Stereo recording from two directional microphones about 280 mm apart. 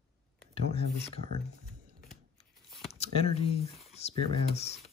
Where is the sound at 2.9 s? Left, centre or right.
Left.